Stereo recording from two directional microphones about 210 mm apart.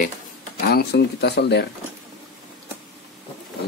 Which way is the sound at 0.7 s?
50° left (ahead or behind).